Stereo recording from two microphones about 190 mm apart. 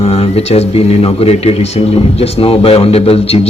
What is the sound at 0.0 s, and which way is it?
Speech, 30° left (ahead or behind).